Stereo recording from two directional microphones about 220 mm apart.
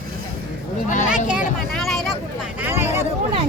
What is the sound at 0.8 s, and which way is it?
Speech, 35° left (ahead or behind).